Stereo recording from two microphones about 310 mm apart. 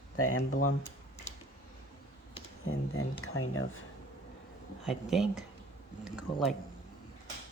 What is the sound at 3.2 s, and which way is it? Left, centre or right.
Speech, left.